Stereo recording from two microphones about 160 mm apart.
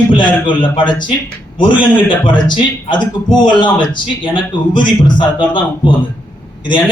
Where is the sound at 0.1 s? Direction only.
30° left (ahead or behind).